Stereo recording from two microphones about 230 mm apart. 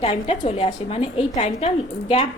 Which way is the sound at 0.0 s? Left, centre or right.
Left.